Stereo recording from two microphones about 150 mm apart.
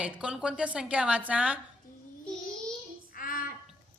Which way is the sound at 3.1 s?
65° left (ahead or behind).